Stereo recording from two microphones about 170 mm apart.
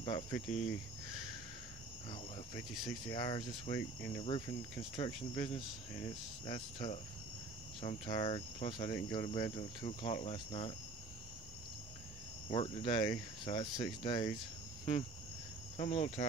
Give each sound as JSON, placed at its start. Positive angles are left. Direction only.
{"t": 0.0, "sound": "speech", "side_deg": 25}
{"t": 2.7, "sound": "speech", "side_deg": 0}
{"t": 3.1, "sound": "speech", "side_deg": 25}
{"t": 12.4, "sound": "speech", "side_deg": 30}
{"t": 15.8, "sound": "speech", "side_deg": 40}